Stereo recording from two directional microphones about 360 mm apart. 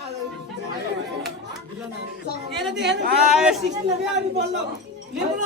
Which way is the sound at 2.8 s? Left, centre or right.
Right.